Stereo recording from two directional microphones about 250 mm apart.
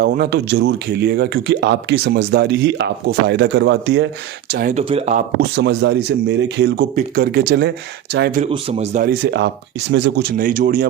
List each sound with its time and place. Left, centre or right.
0.0 s speech: right
4.5 s speech: right
5.4 s speech: right
8.4 s speech: right